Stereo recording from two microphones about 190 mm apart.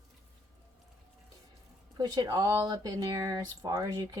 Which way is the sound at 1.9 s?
20° right (ahead or behind).